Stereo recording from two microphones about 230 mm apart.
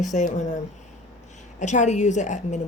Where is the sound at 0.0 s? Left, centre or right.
Left.